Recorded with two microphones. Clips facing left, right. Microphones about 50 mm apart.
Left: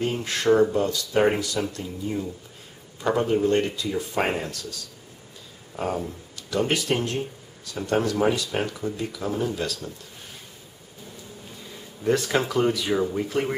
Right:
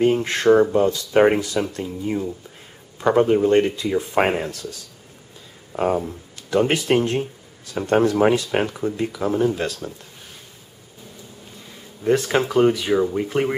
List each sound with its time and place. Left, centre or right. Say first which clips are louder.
0.0 s speech: right 7 dB; right
3.4 s speech: right 5 dB; right
5.8 s speech: right 7 dB; right
8.6 s speech: right 5 dB; right
12.0 s speech: right 4 dB; centre
12.9 s speech: right 5 dB; centre
13.2 s speech: right 4 dB; right